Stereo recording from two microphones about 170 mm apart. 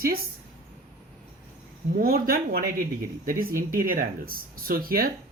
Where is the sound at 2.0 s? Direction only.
60° right (ahead or behind).